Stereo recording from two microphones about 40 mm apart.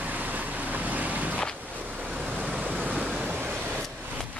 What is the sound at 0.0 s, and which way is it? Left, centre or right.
Waves, right.